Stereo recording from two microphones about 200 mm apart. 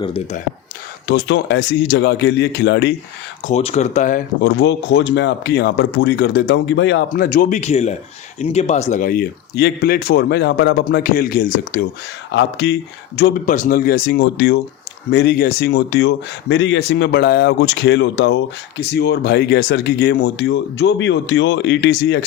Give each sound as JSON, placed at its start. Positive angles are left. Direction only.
{"t": 0.0, "sound": "speech", "side_deg": 30}
{"t": 1.0, "sound": "speech", "side_deg": 60}
{"t": 3.4, "sound": "speech", "side_deg": 30}
{"t": 4.4, "sound": "speech", "side_deg": 60}
{"t": 7.1, "sound": "speech", "side_deg": 45}
{"t": 12.3, "sound": "speech", "side_deg": 65}
{"t": 13.4, "sound": "speech", "side_deg": 40}